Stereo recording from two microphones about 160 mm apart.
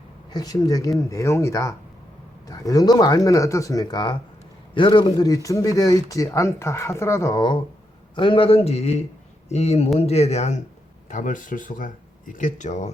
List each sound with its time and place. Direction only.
0.3 s speech: 25° left (ahead or behind); by 10.6 s 45° left (ahead or behind)
11.1 s speech: 55° left (ahead or behind)